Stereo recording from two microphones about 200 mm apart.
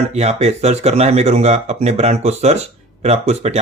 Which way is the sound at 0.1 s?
35° right (ahead or behind).